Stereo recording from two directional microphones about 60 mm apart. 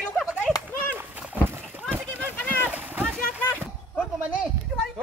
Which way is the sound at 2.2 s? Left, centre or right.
Left.